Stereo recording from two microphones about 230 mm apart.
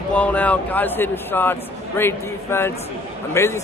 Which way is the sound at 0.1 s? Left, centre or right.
Centre.